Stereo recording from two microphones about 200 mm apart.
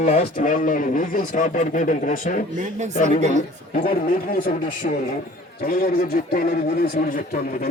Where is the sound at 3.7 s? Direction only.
45° left (ahead or behind).